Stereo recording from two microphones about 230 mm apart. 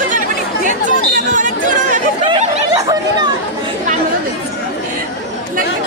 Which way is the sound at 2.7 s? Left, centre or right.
Centre.